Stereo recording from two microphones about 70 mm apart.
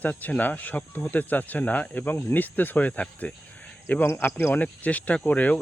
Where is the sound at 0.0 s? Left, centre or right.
Left.